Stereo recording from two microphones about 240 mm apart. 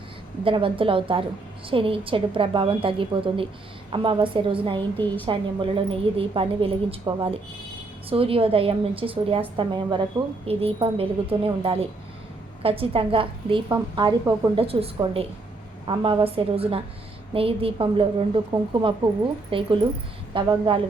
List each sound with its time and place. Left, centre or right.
0.4 s a woman's voice: right